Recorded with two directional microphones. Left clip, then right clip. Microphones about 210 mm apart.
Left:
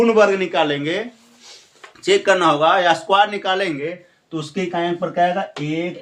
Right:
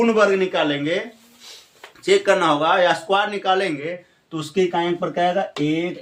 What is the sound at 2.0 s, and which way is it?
Speech, 25° left (ahead or behind).